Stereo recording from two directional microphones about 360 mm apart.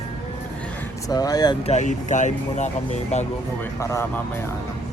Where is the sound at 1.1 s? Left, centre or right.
Centre.